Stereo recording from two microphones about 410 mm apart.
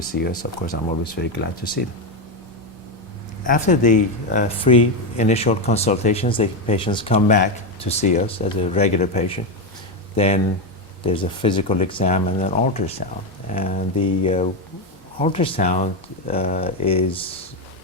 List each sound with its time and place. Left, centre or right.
0.0 s speech: left
3.4 s speech: centre